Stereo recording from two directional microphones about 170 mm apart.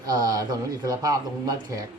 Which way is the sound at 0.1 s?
20° right (ahead or behind).